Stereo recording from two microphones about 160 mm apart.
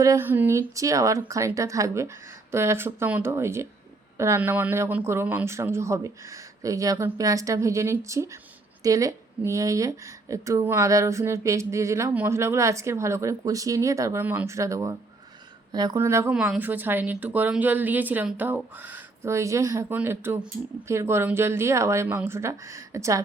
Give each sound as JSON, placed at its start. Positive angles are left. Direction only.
{"t": 0.0, "sound": "speech", "side_deg": -15}